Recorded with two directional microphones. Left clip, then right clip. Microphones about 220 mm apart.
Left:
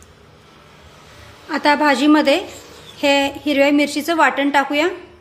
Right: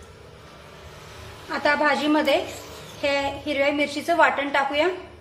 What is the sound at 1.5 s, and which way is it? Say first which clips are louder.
A woman's voice: left 6 dB; 55° left (ahead or behind).